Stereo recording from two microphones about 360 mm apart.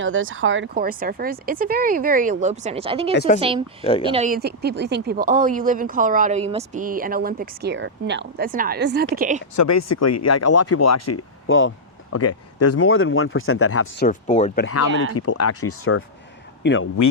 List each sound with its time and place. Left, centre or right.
0.0 s speech: right; by 3.1 s centre
3.2 s speech: left
4.0 s speech: centre
9.6 s speech: left
14.0 s speech: centre
14.7 s speech: left